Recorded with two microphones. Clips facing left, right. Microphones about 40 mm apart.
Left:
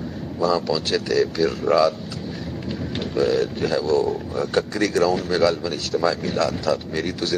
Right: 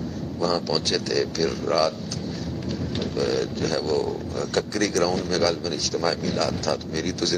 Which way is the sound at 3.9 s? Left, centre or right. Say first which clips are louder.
Left 6 dB; centre.